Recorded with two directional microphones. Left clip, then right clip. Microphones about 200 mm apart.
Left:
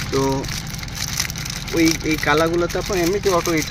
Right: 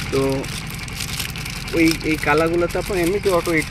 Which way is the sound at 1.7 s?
Centre (ahead or behind).